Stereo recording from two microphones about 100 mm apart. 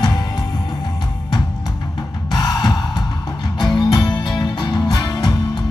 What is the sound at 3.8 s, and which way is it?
Music, 45° left (ahead or behind).